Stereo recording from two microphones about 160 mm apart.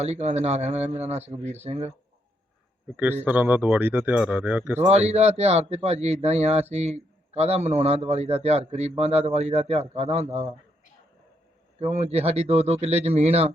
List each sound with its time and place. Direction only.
0.0 s a man's voice: 45° right (ahead or behind)
2.9 s speech: 10° right (ahead or behind)
4.8 s a man's voice: 45° right (ahead or behind)
11.8 s speech: 45° right (ahead or behind)